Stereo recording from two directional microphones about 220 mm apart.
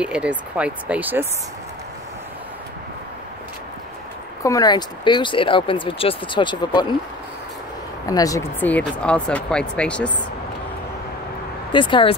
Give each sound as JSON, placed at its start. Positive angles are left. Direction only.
{"t": 0.0, "sound": "speech", "side_deg": -5}
{"t": 4.4, "sound": "speech", "side_deg": 15}
{"t": 8.1, "sound": "speech", "side_deg": 15}
{"t": 11.7, "sound": "speech", "side_deg": 20}